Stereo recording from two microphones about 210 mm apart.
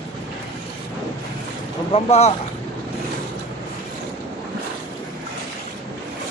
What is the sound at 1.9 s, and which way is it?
Speech, 30° left (ahead or behind).